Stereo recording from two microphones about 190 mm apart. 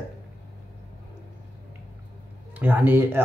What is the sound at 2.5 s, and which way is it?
Speech, 10° right (ahead or behind).